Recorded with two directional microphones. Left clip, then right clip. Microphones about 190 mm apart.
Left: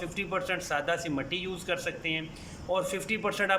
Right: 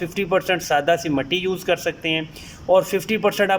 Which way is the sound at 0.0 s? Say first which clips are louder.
Right 11 dB; 35° right (ahead or behind).